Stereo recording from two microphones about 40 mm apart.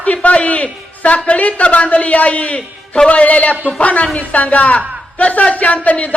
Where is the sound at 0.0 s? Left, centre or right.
Left.